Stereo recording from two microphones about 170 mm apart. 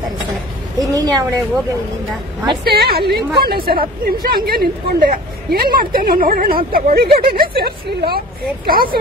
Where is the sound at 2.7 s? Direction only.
65° right (ahead or behind).